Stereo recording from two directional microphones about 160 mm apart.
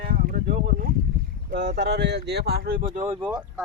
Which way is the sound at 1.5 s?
90° right.